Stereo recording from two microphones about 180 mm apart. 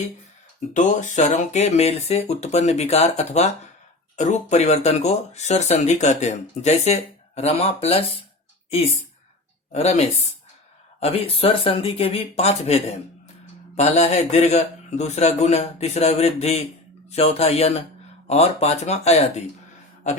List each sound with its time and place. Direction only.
0.7 s speech: 45° left (ahead or behind)
9.7 s speech: 35° left (ahead or behind)